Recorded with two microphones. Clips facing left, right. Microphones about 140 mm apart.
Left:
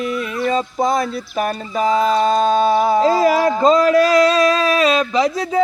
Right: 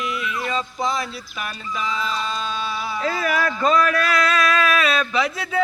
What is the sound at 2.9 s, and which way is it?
Speech, 35° left (ahead or behind).